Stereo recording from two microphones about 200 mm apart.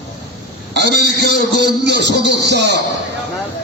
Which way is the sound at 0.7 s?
60° right (ahead or behind).